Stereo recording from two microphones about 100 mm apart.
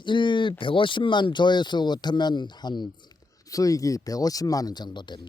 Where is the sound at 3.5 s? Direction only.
35° left (ahead or behind).